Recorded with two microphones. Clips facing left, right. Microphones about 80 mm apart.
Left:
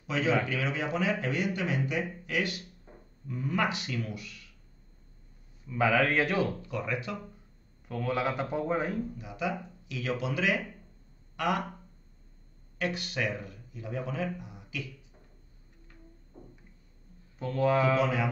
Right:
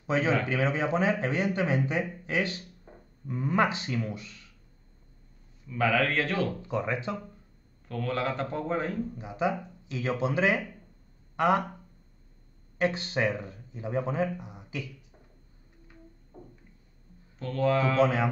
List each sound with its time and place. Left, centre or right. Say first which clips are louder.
0.0 s speech: right 2 dB; right
5.7 s a man's voice: even; centre
6.6 s speech: right 4 dB; right
7.9 s a man's voice: even; centre
9.1 s speech: right 4 dB; right
12.7 s speech: right 5 dB; right
17.4 s a man's voice: even; centre
18.0 s speech: right 4 dB; right